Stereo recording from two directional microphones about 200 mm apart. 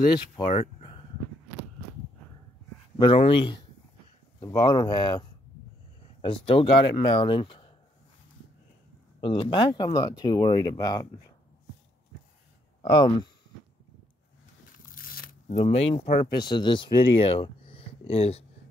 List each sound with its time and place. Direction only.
0.5 s speech: 35° left (ahead or behind)
3.0 s speech: 25° left (ahead or behind)
6.2 s speech: 25° left (ahead or behind)
9.2 s speech: 25° left (ahead or behind)
12.8 s speech: 25° left (ahead or behind)
14.9 s a sound: 45° left (ahead or behind)
15.4 s speech: 30° left (ahead or behind)